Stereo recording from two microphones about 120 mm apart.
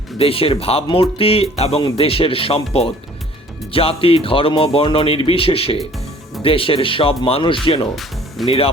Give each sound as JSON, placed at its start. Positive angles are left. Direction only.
{"t": 0.2, "sound": "speech", "side_deg": 50}